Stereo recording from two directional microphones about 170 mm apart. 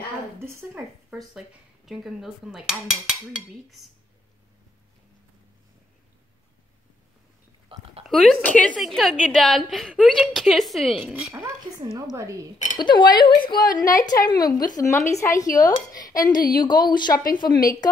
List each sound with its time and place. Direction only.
0.4 s speech: 15° right (ahead or behind)
1.9 s a woman's voice: centre (ahead or behind)
8.0 s a woman's voice: centre (ahead or behind)
11.3 s speech: 15° right (ahead or behind)
12.7 s speech: 25° left (ahead or behind)